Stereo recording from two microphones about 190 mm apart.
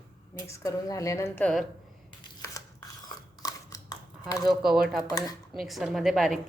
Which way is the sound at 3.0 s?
20° left (ahead or behind).